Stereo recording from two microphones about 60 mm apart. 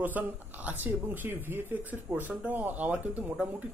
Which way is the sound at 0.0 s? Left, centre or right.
Right.